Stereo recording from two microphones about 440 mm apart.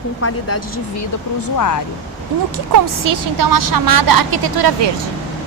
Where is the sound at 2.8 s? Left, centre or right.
Right.